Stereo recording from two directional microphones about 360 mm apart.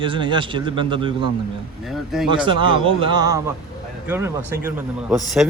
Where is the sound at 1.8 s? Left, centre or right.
Centre.